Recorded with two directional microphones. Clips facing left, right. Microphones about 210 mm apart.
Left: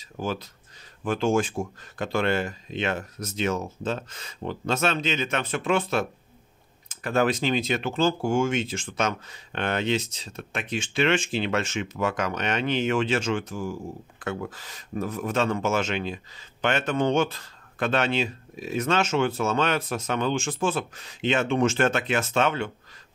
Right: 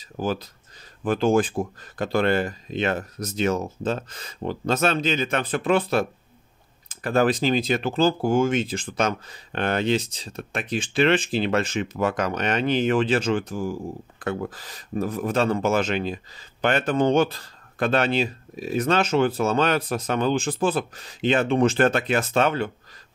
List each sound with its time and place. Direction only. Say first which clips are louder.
0.2 s speech: right 4 dB; 35° right (ahead or behind)